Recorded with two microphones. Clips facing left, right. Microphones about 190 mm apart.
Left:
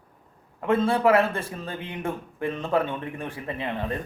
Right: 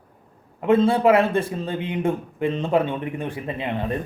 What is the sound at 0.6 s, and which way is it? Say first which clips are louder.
A man's voice: right 4 dB; 20° right (ahead or behind).